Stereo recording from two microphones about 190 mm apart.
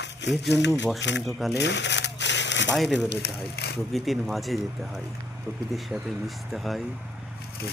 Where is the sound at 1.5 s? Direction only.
65° left (ahead or behind).